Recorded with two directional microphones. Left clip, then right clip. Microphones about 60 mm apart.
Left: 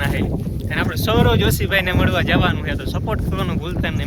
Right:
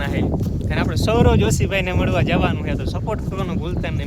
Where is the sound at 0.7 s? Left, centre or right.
Right.